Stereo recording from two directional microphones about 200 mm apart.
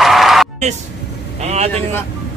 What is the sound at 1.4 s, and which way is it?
Speech, 35° right (ahead or behind).